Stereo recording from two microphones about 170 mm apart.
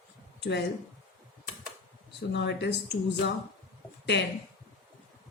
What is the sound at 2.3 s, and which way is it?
Speech, 90° left.